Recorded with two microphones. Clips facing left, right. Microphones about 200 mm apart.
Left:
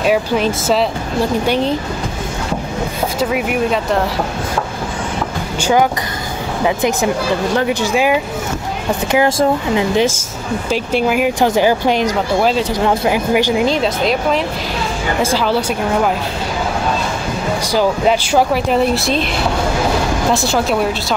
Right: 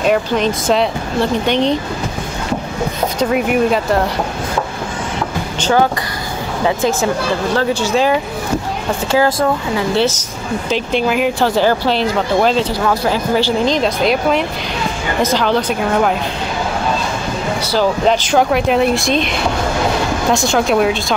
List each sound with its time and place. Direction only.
0.0 s speech: 5° left (ahead or behind)
3.2 s speech: 5° left (ahead or behind)
5.6 s speech: 15° left (ahead or behind)
11.3 s speech: 15° left (ahead or behind)
12.8 s speech: 20° left (ahead or behind)
17.6 s speech: 10° left (ahead or behind)
20.3 s speech: 5° left (ahead or behind)